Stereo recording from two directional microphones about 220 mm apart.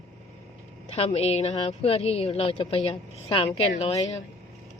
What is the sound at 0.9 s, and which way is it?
A woman's voice, 25° left (ahead or behind).